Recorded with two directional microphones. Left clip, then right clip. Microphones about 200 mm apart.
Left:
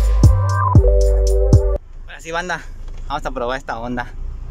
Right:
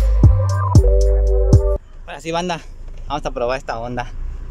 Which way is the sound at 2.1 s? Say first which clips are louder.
Right 1 dB; 20° right (ahead or behind).